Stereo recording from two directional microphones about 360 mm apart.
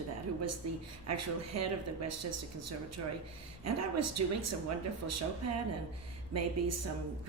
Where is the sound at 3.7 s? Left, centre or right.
Right.